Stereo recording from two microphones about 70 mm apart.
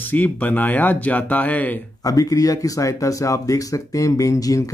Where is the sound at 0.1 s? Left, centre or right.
Left.